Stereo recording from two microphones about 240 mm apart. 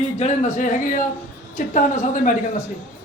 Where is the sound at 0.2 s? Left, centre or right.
Left.